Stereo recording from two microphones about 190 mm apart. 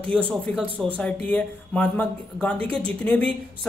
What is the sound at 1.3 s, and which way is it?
Speech, 5° left (ahead or behind).